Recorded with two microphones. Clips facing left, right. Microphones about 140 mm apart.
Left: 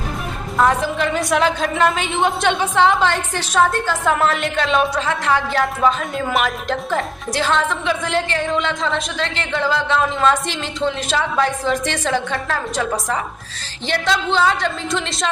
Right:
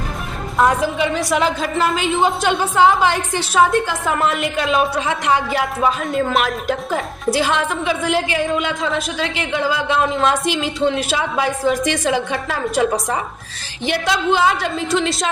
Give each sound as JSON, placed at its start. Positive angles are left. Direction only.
{"t": 0.6, "sound": "a woman's voice", "side_deg": -5}
{"t": 4.9, "sound": "speech", "side_deg": -15}
{"t": 5.5, "sound": "speech", "side_deg": -5}